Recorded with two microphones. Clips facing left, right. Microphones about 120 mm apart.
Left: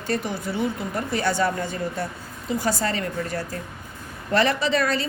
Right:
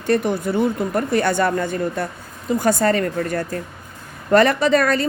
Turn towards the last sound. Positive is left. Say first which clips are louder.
# right 6 dB
turn(degrees=-50)  # may be behind; listen again after turning